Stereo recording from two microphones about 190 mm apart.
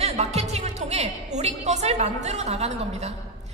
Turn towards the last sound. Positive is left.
turn(degrees=-35)  # may be behind; listen again after turning